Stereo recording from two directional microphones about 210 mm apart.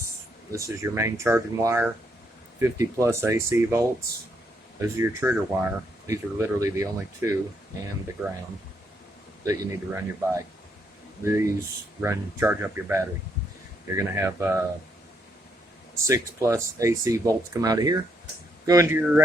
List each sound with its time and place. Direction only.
0.5 s speech: 15° right (ahead or behind)
9.4 s speech: 15° right (ahead or behind)
16.0 s speech: 15° right (ahead or behind)